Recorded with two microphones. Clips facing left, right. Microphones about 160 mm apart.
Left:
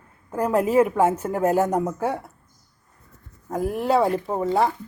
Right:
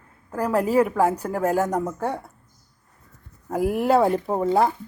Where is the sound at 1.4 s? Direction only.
10° left (ahead or behind).